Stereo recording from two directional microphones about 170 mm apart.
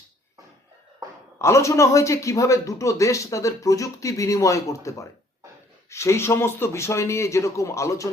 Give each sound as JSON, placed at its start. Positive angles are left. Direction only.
{"t": 1.4, "sound": "speech", "side_deg": 15}